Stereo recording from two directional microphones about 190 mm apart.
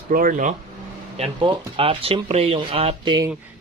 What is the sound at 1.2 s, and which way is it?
Speech, 30° right (ahead or behind).